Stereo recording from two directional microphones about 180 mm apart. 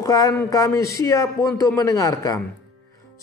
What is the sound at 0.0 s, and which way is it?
A man's voice, 20° left (ahead or behind).